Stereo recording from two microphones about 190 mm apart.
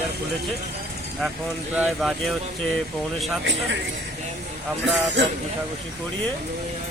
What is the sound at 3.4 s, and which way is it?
Speech, 65° right (ahead or behind).